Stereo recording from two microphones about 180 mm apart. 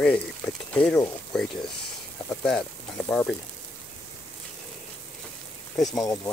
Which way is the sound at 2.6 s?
15° left (ahead or behind).